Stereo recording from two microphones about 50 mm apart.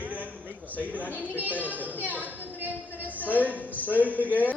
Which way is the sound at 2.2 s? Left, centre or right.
Right.